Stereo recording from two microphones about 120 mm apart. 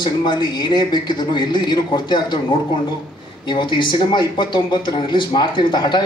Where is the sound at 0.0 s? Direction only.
40° left (ahead or behind).